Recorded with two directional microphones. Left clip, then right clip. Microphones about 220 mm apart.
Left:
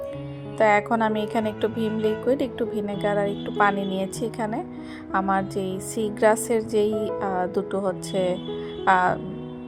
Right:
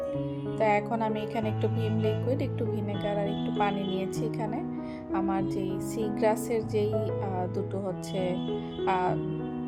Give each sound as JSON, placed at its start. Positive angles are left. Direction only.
{"t": 0.6, "sound": "a woman's voice", "side_deg": 20}